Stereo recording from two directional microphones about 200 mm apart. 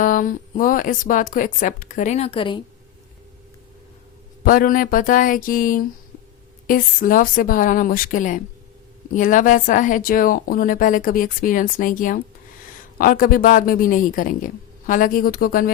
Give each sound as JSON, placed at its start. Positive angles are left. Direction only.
{"t": 0.0, "sound": "speech", "side_deg": 40}
{"t": 4.4, "sound": "a woman's voice", "side_deg": 45}